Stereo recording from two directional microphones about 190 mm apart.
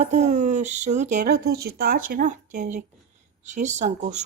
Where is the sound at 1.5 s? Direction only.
55° right (ahead or behind).